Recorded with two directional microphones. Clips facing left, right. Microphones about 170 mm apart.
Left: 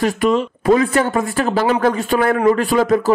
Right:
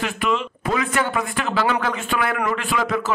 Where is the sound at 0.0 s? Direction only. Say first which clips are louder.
Left 7 dB; 40° left (ahead or behind).